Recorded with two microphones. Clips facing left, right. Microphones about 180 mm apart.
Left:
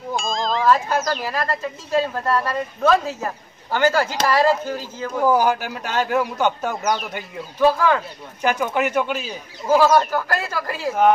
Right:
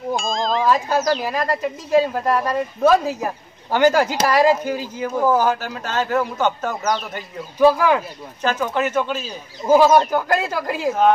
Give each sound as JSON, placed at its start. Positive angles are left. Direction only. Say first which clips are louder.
{"t": 0.1, "sound": "a sound", "louder": "right 2 dB", "side_deg": 0}
{"t": 0.7, "sound": "speech", "louder": "even", "side_deg": -15}
{"t": 5.3, "sound": "a man's voice", "louder": "even", "side_deg": 15}
{"t": 7.5, "sound": "speech", "louder": "right 2 dB", "side_deg": -10}
{"t": 8.4, "sound": "a man's voice", "louder": "even", "side_deg": 15}
{"t": 9.7, "sound": "speech", "louder": "right 2 dB", "side_deg": -20}